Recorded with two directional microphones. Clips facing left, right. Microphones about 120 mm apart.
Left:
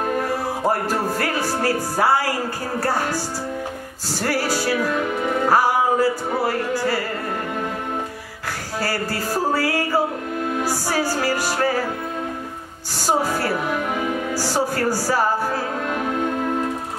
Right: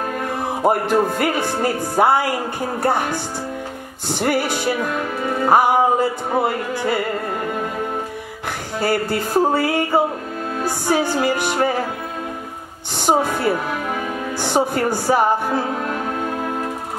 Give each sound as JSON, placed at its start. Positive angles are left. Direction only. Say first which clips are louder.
{"t": 0.7, "sound": "speech", "louder": "right 5 dB", "side_deg": -20}
{"t": 8.7, "sound": "speech", "louder": "right 5 dB", "side_deg": -20}
{"t": 13.0, "sound": "speech", "louder": "right 3 dB", "side_deg": -20}